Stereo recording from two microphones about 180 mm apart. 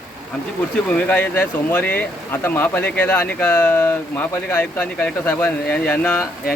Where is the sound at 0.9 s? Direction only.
10° left (ahead or behind).